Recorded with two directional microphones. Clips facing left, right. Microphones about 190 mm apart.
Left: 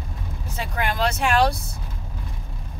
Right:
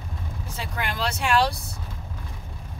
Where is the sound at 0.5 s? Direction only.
50° left (ahead or behind).